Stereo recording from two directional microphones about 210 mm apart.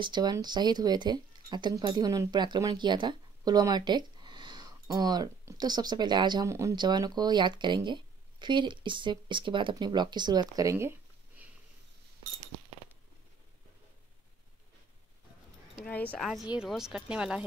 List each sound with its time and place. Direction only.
0.0 s speech: 20° right (ahead or behind)
15.8 s speech: 5° left (ahead or behind)